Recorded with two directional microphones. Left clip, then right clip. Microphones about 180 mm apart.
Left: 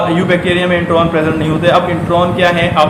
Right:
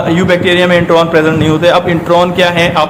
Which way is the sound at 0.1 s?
40° right (ahead or behind).